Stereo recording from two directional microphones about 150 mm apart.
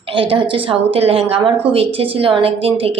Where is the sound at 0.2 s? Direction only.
35° right (ahead or behind).